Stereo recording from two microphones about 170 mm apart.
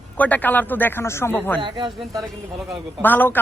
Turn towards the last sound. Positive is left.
turn(degrees=10)  # may be behind; listen again after turning